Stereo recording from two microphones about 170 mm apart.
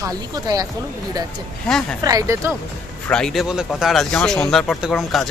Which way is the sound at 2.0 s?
20° right (ahead or behind).